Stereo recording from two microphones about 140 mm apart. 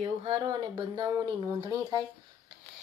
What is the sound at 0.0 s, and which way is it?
Speech, 40° right (ahead or behind).